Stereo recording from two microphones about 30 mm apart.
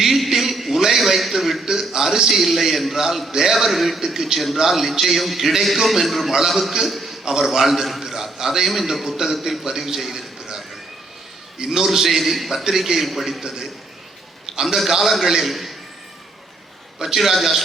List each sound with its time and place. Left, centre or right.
0.0 s a sound: centre
0.9 s a man's voice: centre
1.6 s a man's voice: centre
11.5 s a man's voice: centre
11.9 s a man's voice: centre
14.9 s a man's voice: centre
17.0 s a man's voice: right